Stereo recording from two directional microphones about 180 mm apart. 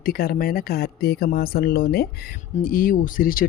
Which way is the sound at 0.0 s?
55° left (ahead or behind).